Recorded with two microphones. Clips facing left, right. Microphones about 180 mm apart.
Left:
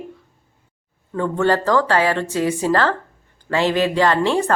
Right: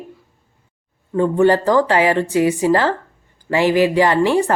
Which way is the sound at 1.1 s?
15° right (ahead or behind).